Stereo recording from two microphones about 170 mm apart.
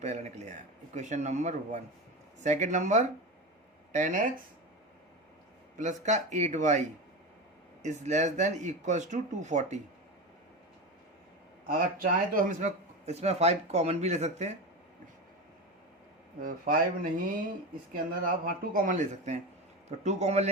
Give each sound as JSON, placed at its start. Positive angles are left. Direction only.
{"t": 0.0, "sound": "speech", "side_deg": -40}
{"t": 5.7, "sound": "speech", "side_deg": -45}
{"t": 8.0, "sound": "speech", "side_deg": -45}
{"t": 11.6, "sound": "speech", "side_deg": -55}
{"t": 16.4, "sound": "speech", "side_deg": -55}